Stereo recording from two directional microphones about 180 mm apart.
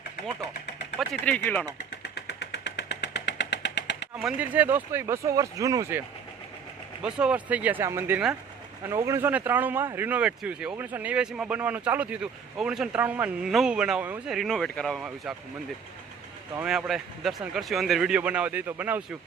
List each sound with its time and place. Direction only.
0.9 s speech: 5° left (ahead or behind)
2.0 s vehicle: 65° left (ahead or behind)
4.1 s speech: 5° right (ahead or behind)
7.0 s speech: 5° right (ahead or behind)
16.6 s speech: 5° right (ahead or behind)